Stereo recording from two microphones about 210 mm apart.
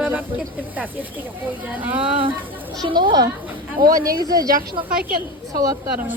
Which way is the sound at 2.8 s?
20° right (ahead or behind).